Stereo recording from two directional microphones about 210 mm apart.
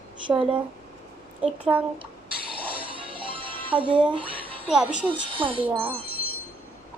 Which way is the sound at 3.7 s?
5° right (ahead or behind).